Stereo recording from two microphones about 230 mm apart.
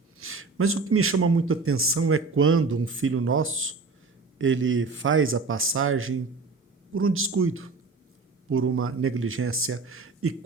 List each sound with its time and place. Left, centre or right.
0.2 s a man's voice: right